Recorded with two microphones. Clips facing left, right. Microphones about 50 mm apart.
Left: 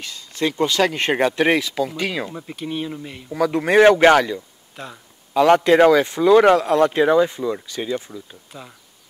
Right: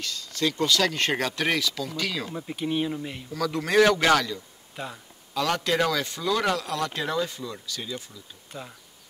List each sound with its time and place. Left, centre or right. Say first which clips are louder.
0.0 s speech: left 4 dB; left
2.5 s speech: right 1 dB; centre
3.3 s speech: left 9 dB; left
8.5 s speech: even; centre